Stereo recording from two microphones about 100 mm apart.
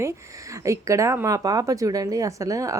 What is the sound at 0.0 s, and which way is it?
Speech, 30° right (ahead or behind).